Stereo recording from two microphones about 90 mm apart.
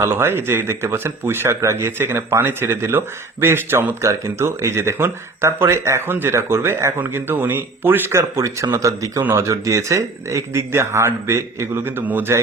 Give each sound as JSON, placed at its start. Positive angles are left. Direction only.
{"t": 0.0, "sound": "speech", "side_deg": -25}
{"t": 8.4, "sound": "a man's voice", "side_deg": -35}